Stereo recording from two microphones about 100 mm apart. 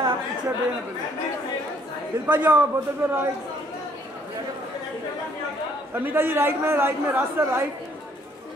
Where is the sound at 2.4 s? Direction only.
20° right (ahead or behind).